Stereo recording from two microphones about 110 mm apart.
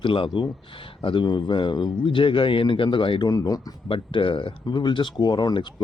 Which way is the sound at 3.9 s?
50° left (ahead or behind).